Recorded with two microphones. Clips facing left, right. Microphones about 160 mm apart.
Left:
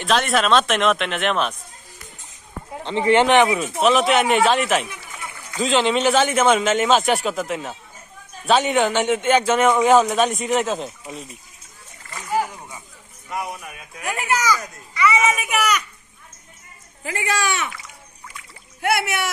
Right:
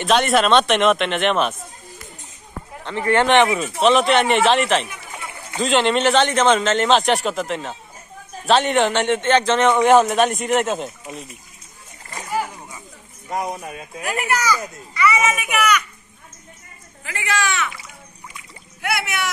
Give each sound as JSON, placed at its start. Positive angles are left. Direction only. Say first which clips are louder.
{"t": 0.0, "sound": "a man's voice", "louder": "right 3 dB", "side_deg": 0}
{"t": 2.8, "sound": "speech", "louder": "left 2 dB", "side_deg": 20}
{"t": 3.3, "sound": "a man's voice", "louder": "even", "side_deg": 0}
{"t": 5.1, "sound": "a sound", "louder": "right 3 dB", "side_deg": -25}
{"t": 5.6, "sound": "a man's voice", "louder": "right 1 dB", "side_deg": 0}
{"t": 13.3, "sound": "speech", "louder": "right 4 dB", "side_deg": -35}
{"t": 14.0, "sound": "a child's voice", "louder": "even", "side_deg": 20}
{"t": 15.5, "sound": "a child's voice", "louder": "right 2 dB", "side_deg": 35}
{"t": 17.0, "sound": "speech", "louder": "even", "side_deg": 30}
{"t": 18.8, "sound": "speech", "louder": "left 3 dB", "side_deg": 50}